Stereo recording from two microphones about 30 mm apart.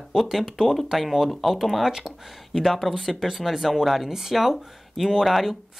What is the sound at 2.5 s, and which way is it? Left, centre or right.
Speech, centre.